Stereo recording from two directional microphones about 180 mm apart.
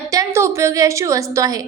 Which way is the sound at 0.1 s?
15° right (ahead or behind).